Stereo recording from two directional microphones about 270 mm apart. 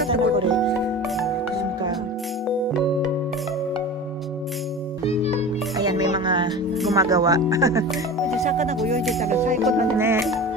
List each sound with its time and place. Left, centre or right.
0.1 s speech: centre
5.0 s music: left
5.8 s music: centre
7.0 s speech: centre
8.5 s speech: right
9.6 s music: centre